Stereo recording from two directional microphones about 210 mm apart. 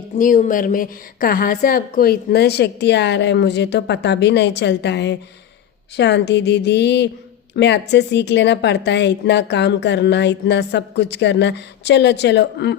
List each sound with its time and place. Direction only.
0.2 s a woman's voice: 40° left (ahead or behind)